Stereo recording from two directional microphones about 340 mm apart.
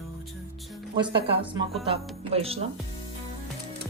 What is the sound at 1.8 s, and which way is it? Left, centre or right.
Speech, centre.